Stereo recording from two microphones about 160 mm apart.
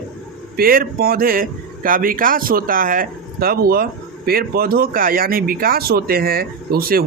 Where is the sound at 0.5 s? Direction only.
65° right (ahead or behind).